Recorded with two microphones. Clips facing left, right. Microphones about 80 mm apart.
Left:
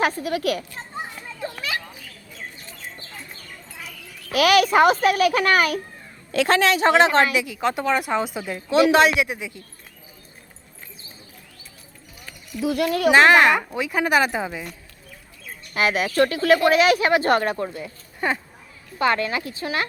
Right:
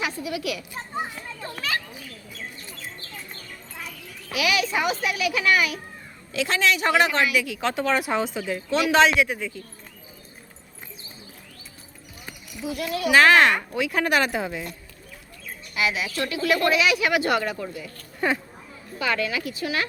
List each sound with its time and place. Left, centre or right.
0.0 s a child's voice: left
4.3 s a child's voice: left
7.6 s a man's voice: centre
12.6 s a child's voice: left
13.1 s a child's voice: left
13.3 s a man's voice: centre
15.7 s a child's voice: left
18.2 s a man's voice: centre
18.9 s a woman's voice: left